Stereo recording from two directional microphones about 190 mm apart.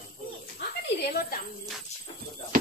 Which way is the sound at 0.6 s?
60° left (ahead or behind).